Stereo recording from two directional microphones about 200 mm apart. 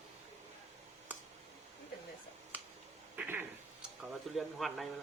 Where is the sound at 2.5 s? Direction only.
5° right (ahead or behind).